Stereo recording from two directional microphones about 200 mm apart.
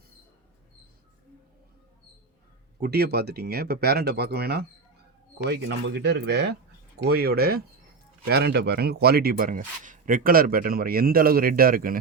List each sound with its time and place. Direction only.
2.8 s speech: 55° right (ahead or behind)